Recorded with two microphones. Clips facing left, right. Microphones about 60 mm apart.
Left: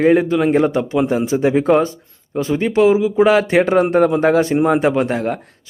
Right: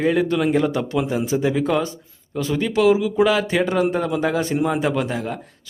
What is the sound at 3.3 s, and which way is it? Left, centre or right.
A man's voice, left.